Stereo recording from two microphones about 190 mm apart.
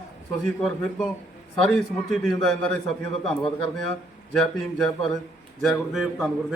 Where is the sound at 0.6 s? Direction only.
Centre (ahead or behind).